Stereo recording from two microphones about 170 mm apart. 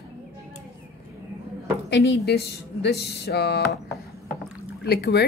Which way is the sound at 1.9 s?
85° left.